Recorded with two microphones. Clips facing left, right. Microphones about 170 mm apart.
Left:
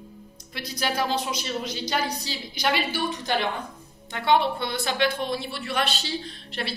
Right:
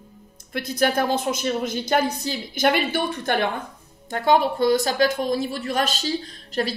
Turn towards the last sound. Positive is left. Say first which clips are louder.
# right 7 dB
turn(degrees=-40)  # may be behind; listen again after turning